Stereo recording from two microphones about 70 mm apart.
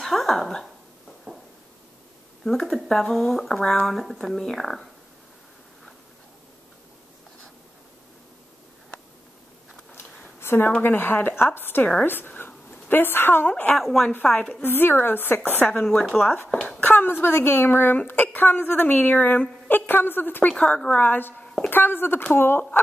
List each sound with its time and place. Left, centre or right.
0.0 s a sound: centre
2.6 s speech: centre
9.9 s a sound: left
10.7 s a woman's voice: left
13.7 s speech: centre
14.3 s a woman's voice: left
15.8 s speech: centre
16.8 s a sound: left
17.2 s a woman's voice: left
20.5 s a woman's voice: centre; by 22.8 s left